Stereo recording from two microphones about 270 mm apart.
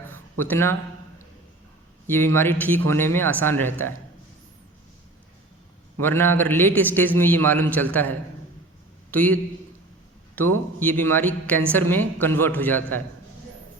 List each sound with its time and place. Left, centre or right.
0.1 s a sound: centre
2.0 s a man's voice: centre
6.0 s a man's voice: centre
9.1 s a man's voice: centre
10.8 s a man's voice: centre